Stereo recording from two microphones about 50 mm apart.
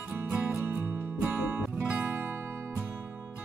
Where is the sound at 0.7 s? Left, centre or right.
Right.